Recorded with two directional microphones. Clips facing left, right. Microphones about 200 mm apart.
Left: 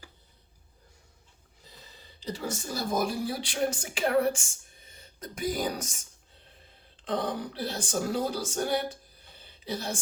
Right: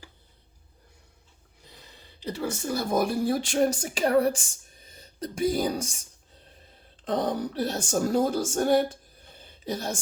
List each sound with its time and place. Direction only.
2.7 s speech: 55° right (ahead or behind); by 6.0 s 30° right (ahead or behind)
7.0 s a woman's voice: 45° right (ahead or behind)
9.4 s a sound: 45° right (ahead or behind)